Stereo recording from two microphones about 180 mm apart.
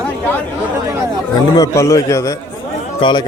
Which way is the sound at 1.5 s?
20° left (ahead or behind).